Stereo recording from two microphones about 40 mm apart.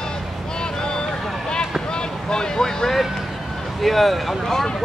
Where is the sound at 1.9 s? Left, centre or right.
Centre.